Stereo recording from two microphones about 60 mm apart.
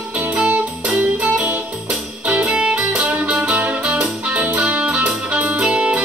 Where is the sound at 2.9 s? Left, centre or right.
Right.